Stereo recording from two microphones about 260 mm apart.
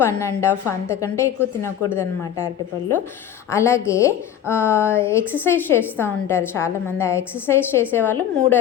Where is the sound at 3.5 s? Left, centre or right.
Centre.